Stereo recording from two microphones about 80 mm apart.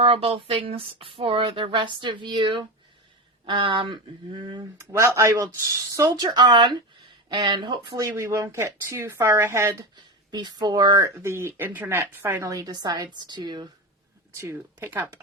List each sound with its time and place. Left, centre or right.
0.4 s speech: right
3.4 s a sound: right
4.8 s speech: right
6.3 s a sound: right
8.1 s speech: right
9.9 s speech: right
11.1 s speech: right
12.5 s a woman's voice: right
13.2 s a sound: right
14.4 s speech: right